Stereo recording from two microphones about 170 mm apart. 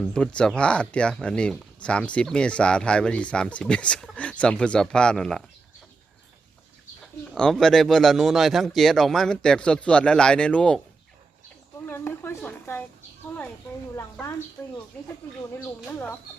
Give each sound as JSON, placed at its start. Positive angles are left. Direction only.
{"t": 0.1, "sound": "speech", "side_deg": 5}
{"t": 7.3, "sound": "speech", "side_deg": 5}
{"t": 11.9, "sound": "a sound", "side_deg": 15}
{"t": 12.4, "sound": "speech", "side_deg": 15}
{"t": 13.9, "sound": "speech", "side_deg": 15}
{"t": 15.5, "sound": "speech", "side_deg": 10}